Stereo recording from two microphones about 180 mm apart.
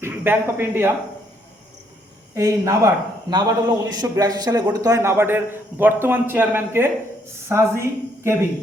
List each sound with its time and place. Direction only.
0.0 s speech: 10° right (ahead or behind)
2.3 s a man's voice: 15° right (ahead or behind)